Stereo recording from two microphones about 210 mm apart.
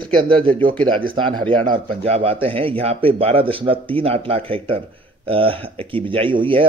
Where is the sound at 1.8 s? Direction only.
30° right (ahead or behind).